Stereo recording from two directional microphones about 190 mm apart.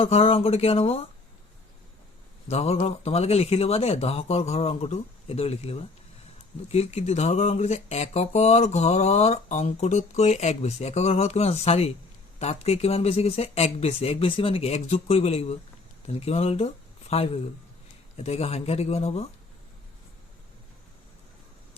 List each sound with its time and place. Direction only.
0.0 s speech: 30° left (ahead or behind)
2.5 s speech: 35° left (ahead or behind)